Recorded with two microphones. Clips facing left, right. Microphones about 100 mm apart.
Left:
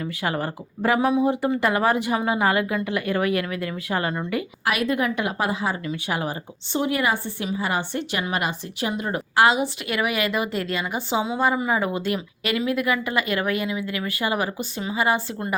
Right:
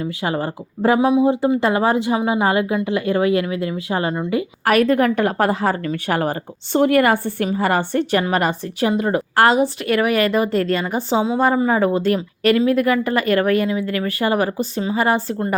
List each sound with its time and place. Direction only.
0.0 s speech: 25° right (ahead or behind)
4.6 s a woman's voice: 45° right (ahead or behind)
8.9 s speech: 35° right (ahead or behind)